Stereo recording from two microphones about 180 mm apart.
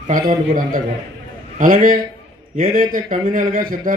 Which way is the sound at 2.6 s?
45° right (ahead or behind).